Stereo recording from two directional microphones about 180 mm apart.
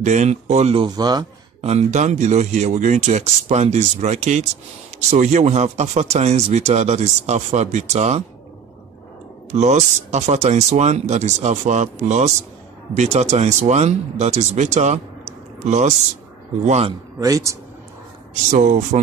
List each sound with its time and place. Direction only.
0.0 s speech: 40° right (ahead or behind)
0.8 s a man's voice: 20° right (ahead or behind)
1.7 s speech: 40° right (ahead or behind)
9.5 s speech: 40° right (ahead or behind)
17.2 s speech: 20° right (ahead or behind)
18.3 s speech: 45° right (ahead or behind)